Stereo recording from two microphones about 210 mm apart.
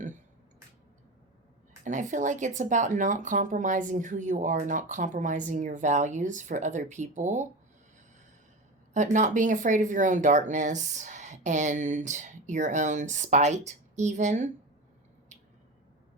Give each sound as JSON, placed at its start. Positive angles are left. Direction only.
{"t": 1.8, "sound": "speech", "side_deg": -35}
{"t": 8.9, "sound": "speech", "side_deg": -35}